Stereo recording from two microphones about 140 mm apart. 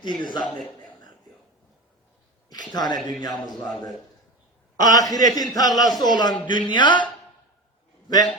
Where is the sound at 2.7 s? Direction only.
30° left (ahead or behind).